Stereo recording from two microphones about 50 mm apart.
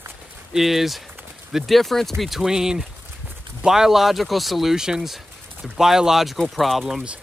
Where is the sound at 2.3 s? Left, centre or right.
Centre.